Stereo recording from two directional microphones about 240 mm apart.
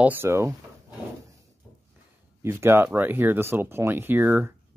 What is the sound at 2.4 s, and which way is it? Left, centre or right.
Speech, centre.